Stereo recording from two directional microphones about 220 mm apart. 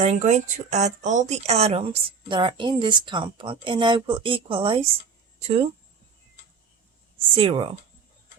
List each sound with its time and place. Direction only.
0.0 s speech: 30° right (ahead or behind)
7.3 s speech: 20° right (ahead or behind)